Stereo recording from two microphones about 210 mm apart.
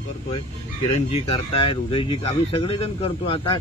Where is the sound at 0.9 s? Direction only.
30° left (ahead or behind).